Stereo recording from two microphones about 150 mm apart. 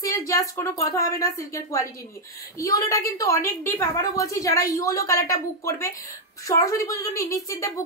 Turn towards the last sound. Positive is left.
turn(degrees=20)  # may be behind; listen again after turning